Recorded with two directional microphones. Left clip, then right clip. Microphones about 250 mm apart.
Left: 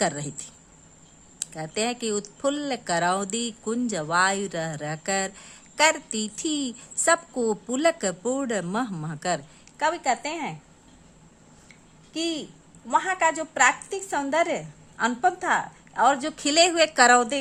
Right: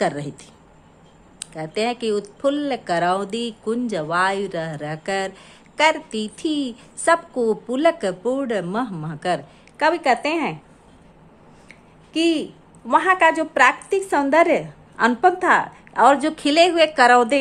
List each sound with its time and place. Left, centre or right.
0.0 s speech: left
9.8 s a woman's voice: centre
12.1 s a woman's voice: centre